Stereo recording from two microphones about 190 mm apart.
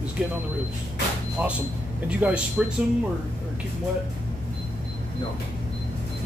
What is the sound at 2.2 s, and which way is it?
Speech, 10° right (ahead or behind).